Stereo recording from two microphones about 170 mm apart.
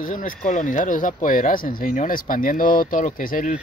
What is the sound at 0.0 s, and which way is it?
Speech, 50° left (ahead or behind).